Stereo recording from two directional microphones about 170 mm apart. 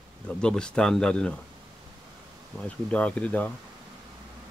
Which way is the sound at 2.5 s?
5° left (ahead or behind).